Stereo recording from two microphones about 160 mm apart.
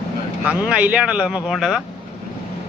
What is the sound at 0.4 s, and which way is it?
Speech, 10° right (ahead or behind).